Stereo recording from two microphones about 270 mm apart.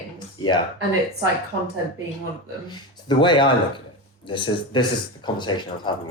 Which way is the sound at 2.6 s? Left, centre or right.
Centre.